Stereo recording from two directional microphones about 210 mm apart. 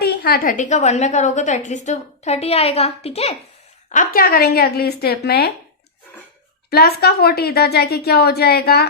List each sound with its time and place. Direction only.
0.0 s a woman's voice: 50° left (ahead or behind); by 3.3 s 30° left (ahead or behind)
3.8 s a woman's voice: 40° left (ahead or behind)
6.7 s a woman's voice: 50° left (ahead or behind)